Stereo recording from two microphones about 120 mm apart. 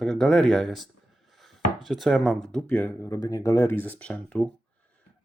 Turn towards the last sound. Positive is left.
turn(degrees=10)  # may be behind; listen again after turning